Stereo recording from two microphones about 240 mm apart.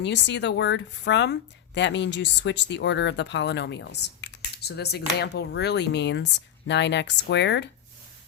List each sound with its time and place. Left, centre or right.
0.0 s speech: left